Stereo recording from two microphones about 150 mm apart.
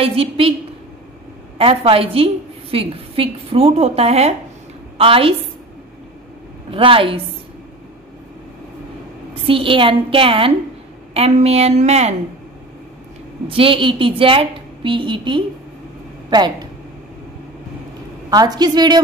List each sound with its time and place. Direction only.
0.0 s a woman's voice: 40° right (ahead or behind)
1.6 s a woman's voice: 40° right (ahead or behind)
6.7 s a woman's voice: 35° right (ahead or behind)
9.3 s a woman's voice: 35° right (ahead or behind)
13.5 s a woman's voice: 35° right (ahead or behind)
18.3 s a woman's voice: 25° right (ahead or behind)